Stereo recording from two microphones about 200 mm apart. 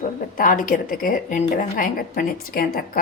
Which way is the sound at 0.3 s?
45° left (ahead or behind).